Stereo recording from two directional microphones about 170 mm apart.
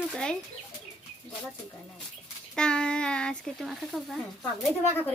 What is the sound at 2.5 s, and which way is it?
Speech, 5° left (ahead or behind).